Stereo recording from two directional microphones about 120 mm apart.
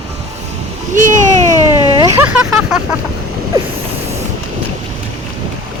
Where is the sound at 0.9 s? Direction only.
90° right.